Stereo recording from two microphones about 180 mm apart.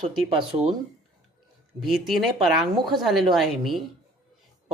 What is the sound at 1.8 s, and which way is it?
A woman's voice, centre (ahead or behind).